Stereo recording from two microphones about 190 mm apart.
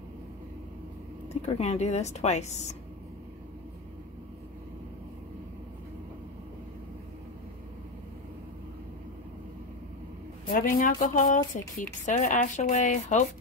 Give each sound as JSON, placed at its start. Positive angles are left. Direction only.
{"t": 1.3, "sound": "a woman's voice", "side_deg": 35}
{"t": 10.5, "sound": "a woman's voice", "side_deg": 45}